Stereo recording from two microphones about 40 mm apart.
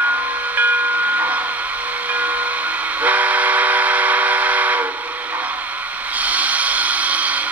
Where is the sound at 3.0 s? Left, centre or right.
Right.